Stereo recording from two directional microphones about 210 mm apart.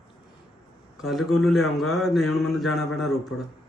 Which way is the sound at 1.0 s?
Centre (ahead or behind).